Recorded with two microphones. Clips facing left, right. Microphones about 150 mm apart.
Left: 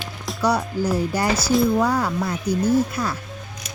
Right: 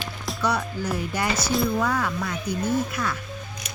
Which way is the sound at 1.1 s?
35° left (ahead or behind).